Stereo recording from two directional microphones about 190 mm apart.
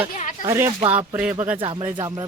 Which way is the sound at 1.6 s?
25° right (ahead or behind).